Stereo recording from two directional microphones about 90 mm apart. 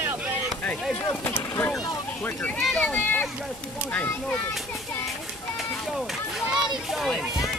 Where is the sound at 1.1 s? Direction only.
30° left (ahead or behind).